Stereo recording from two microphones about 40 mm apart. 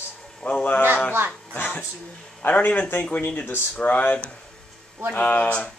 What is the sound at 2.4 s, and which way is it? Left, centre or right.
A man's voice, left.